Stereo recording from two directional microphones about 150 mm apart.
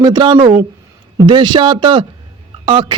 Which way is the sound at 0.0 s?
30° right (ahead or behind).